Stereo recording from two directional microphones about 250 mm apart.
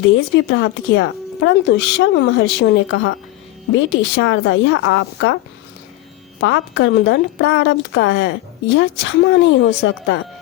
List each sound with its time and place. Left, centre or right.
0.3 s a woman's voice: left
6.4 s a woman's voice: left